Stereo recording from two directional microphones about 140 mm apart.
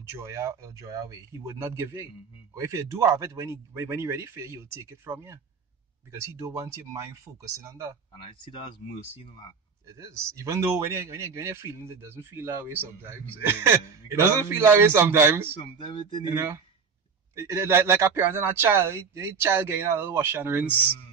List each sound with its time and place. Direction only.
0.2 s a man's voice: 20° right (ahead or behind)
8.2 s speech: 35° left (ahead or behind)
9.8 s a man's voice: 20° right (ahead or behind)
15.5 s speech: 40° left (ahead or behind)
16.3 s a man's voice: 25° right (ahead or behind)